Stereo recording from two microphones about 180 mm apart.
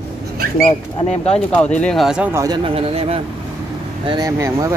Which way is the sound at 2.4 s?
25° right (ahead or behind).